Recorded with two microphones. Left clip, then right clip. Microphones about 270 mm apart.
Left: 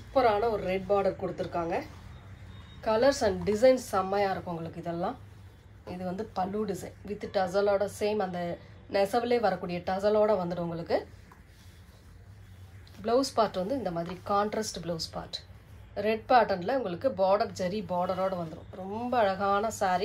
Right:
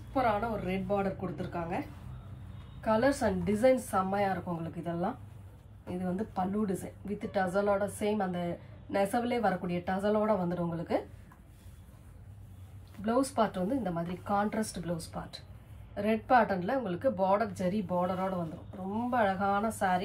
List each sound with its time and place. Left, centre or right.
0.1 s a woman's voice: left
13.0 s a woman's voice: left